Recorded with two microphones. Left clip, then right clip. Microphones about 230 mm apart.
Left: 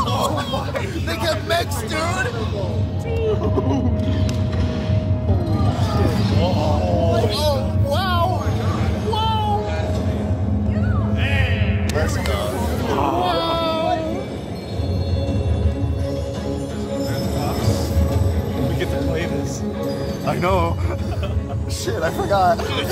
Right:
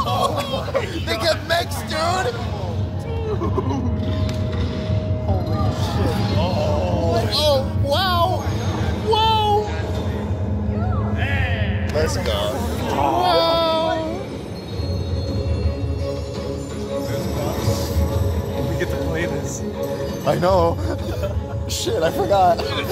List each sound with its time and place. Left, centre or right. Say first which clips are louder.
0.0 s music: right 1 dB; right
1.2 s hubbub: even; right
7.3 s music: right 3 dB; right
11.9 s a sound: right 2 dB; right
12.9 s music: right 1 dB; right
13.3 s baby cry: right 3 dB; right
20.2 s music: right 3 dB; right
21.8 s music: right 2 dB; right